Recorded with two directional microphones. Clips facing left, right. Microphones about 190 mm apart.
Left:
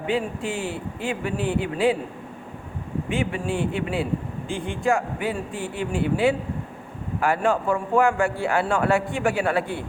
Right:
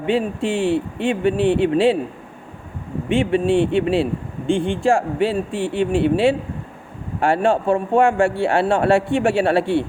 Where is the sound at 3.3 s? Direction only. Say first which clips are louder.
Right 9 dB; 25° right (ahead or behind).